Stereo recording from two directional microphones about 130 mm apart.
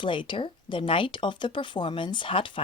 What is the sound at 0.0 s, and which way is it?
Speech, 40° left (ahead or behind).